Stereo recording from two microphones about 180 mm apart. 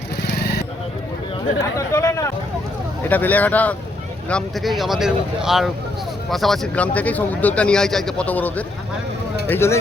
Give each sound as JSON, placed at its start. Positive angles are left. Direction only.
{"t": 0.2, "sound": "vehicle", "side_deg": 65}
{"t": 1.9, "sound": "a sound", "side_deg": 15}
{"t": 3.1, "sound": "speech", "side_deg": 10}